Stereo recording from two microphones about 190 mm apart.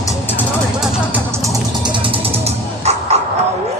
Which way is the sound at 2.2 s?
35° right (ahead or behind).